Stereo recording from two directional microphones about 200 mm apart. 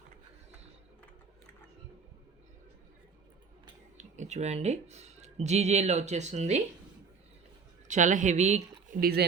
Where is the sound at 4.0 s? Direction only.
35° right (ahead or behind).